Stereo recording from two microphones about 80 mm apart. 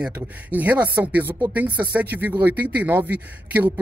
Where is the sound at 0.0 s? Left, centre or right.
Right.